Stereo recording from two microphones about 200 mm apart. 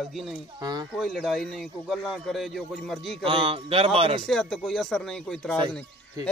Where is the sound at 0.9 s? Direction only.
Centre (ahead or behind).